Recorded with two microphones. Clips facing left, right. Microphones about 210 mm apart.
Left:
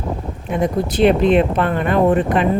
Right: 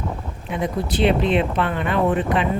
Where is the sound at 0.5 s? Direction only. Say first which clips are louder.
Left 5 dB; 45° left (ahead or behind).